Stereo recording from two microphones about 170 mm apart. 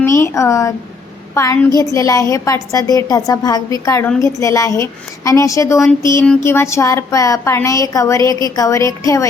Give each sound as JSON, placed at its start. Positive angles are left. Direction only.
{"t": 0.0, "sound": "a woman's voice", "side_deg": 15}